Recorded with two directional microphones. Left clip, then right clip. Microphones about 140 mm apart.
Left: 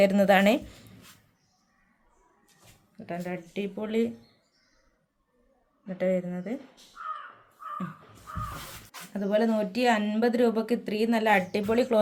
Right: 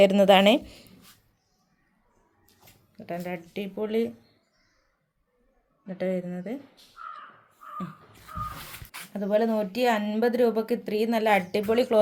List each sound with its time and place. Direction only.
0.0 s speech: 35° right (ahead or behind)
2.9 s speech: 30° right (ahead or behind)
5.8 s speech: 25° right (ahead or behind)
8.9 s speech: 30° right (ahead or behind)